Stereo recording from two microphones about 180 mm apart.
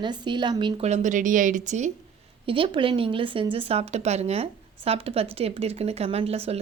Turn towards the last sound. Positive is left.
turn(degrees=-35)  # may be behind; listen again after turning